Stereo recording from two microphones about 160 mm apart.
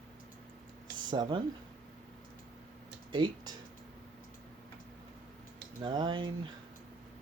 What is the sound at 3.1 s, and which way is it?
Speech, 30° right (ahead or behind).